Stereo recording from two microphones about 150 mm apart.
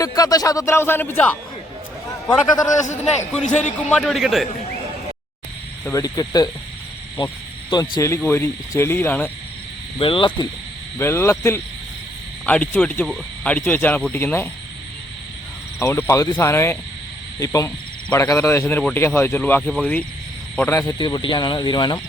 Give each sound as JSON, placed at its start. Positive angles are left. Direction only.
{"t": 0.0, "sound": "speech", "side_deg": 25}
{"t": 2.8, "sound": "a man's voice", "side_deg": 55}
{"t": 3.8, "sound": "a man's voice", "side_deg": 5}
{"t": 5.8, "sound": "speech", "side_deg": 20}
{"t": 7.7, "sound": "speech", "side_deg": 25}
{"t": 10.0, "sound": "speech", "side_deg": 35}
{"t": 10.9, "sound": "speech", "side_deg": 15}
{"t": 15.8, "sound": "speech", "side_deg": 20}
{"t": 18.6, "sound": "speech", "side_deg": 10}
{"t": 21.0, "sound": "speech", "side_deg": 30}